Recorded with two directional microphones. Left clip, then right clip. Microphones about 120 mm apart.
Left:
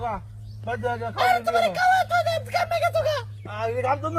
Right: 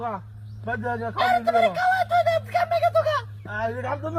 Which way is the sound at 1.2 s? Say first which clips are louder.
Even; 30° left (ahead or behind).